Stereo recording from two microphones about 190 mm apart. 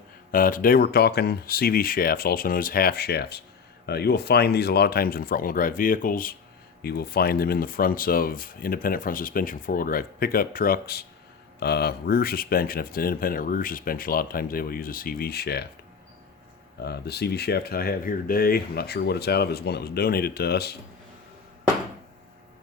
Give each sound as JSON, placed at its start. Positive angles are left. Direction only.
{"t": 0.3, "sound": "speech", "side_deg": 50}
{"t": 16.8, "sound": "speech", "side_deg": 60}